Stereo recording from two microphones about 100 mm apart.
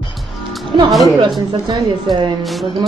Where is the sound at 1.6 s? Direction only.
50° right (ahead or behind).